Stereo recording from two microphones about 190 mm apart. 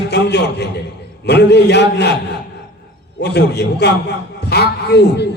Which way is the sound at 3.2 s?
60° left (ahead or behind).